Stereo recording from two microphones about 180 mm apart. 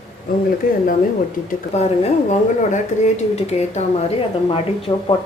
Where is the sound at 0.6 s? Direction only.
50° left (ahead or behind).